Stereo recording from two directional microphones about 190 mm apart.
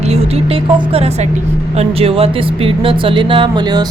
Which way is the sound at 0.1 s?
30° right (ahead or behind).